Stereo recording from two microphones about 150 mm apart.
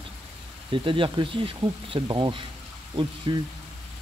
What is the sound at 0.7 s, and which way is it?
Speech, 35° right (ahead or behind).